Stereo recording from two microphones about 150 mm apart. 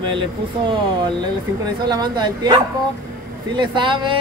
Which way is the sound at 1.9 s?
30° right (ahead or behind).